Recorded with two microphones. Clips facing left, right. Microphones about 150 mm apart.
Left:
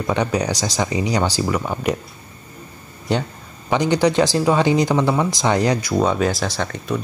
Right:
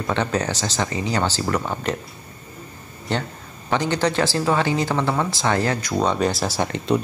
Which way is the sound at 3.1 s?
15° left (ahead or behind).